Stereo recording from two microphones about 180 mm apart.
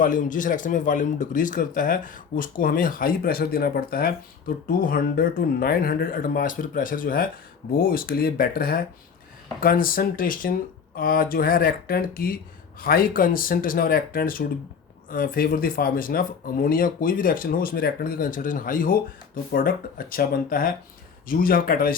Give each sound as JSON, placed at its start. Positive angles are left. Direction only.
{"t": 0.0, "sound": "speech", "side_deg": 45}